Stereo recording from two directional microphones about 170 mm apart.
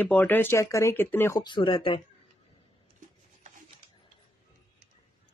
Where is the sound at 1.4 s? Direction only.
30° left (ahead or behind).